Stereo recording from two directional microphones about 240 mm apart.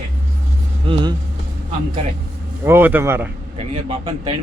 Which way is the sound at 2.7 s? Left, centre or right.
Centre.